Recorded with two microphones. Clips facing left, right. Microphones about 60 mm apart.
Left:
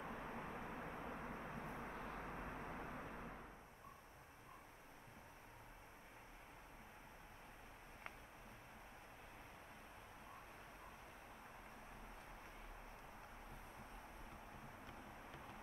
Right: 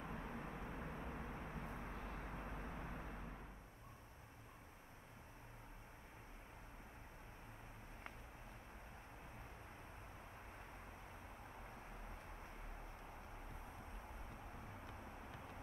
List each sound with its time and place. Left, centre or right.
0.0 s vehicle: left